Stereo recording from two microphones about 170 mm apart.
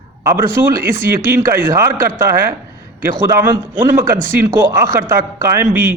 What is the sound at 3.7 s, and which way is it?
Speech, 15° right (ahead or behind).